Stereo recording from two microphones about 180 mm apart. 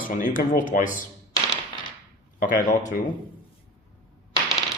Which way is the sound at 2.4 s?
50° left (ahead or behind).